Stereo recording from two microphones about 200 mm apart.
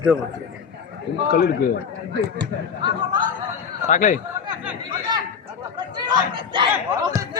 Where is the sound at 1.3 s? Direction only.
50° left (ahead or behind).